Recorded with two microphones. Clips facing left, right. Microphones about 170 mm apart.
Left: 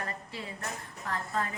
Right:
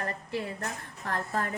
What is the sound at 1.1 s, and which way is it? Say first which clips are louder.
Speech: right 2 dB; 55° right (ahead or behind).